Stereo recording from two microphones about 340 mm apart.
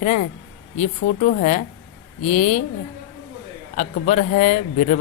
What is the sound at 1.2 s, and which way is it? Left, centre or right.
A woman's voice, left.